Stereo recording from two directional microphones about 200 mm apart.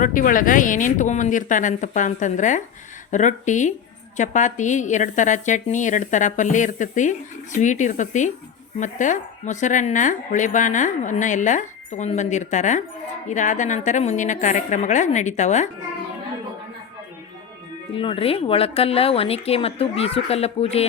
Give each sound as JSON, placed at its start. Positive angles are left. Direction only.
{"t": 0.0, "sound": "a woman's voice", "side_deg": 40}
{"t": 17.9, "sound": "speech", "side_deg": 25}